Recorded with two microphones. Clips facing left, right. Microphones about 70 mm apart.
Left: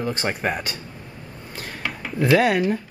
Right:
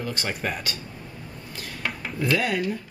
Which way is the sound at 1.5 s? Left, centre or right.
Left.